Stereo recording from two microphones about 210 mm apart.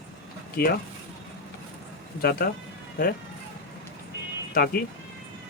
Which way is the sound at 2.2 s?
45° left (ahead or behind).